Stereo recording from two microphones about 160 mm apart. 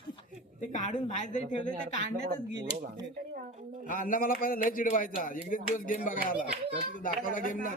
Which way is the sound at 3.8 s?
60° left (ahead or behind).